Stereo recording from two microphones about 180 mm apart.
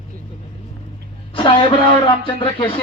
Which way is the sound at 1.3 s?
30° left (ahead or behind).